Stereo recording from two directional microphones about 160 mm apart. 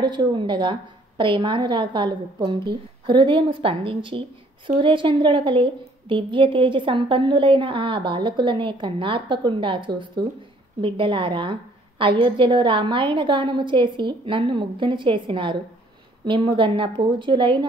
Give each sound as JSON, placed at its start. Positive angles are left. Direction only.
{"t": 0.0, "sound": "a woman's voice", "side_deg": -30}